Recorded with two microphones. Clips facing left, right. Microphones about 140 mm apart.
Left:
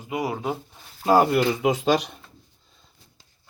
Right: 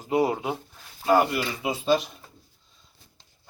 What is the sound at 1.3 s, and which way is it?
Speech, 80° left.